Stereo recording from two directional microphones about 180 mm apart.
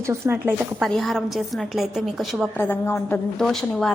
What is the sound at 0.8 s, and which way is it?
A woman's voice, centre (ahead or behind).